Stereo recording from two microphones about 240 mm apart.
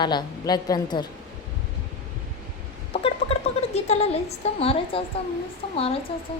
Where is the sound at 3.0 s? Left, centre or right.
Left.